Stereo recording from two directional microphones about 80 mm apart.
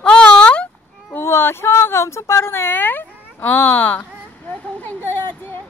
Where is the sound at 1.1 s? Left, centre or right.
Left.